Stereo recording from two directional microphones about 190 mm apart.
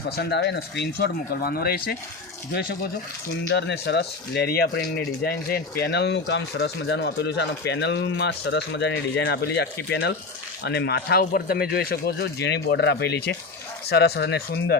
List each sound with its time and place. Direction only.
0.2 s speech: 60° left (ahead or behind)
3.5 s speech: 65° left (ahead or behind)